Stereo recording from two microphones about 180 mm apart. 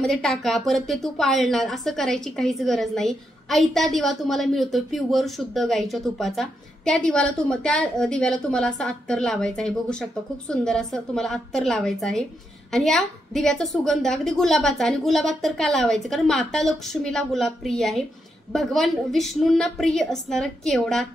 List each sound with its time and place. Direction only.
0.0 s a woman's voice: centre (ahead or behind)